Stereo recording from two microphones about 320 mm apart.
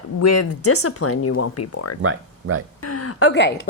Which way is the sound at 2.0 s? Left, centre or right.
Right.